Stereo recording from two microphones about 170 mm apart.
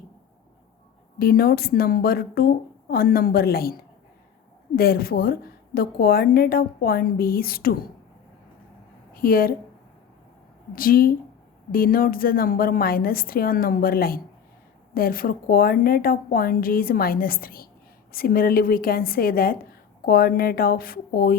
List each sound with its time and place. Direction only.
1.2 s a woman's voice: 60° left (ahead or behind)
4.8 s a woman's voice: 60° left (ahead or behind)
9.1 s a woman's voice: 60° left (ahead or behind)
10.8 s a woman's voice: 60° left (ahead or behind)